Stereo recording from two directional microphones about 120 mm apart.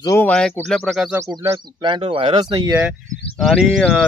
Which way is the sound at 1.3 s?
25° right (ahead or behind).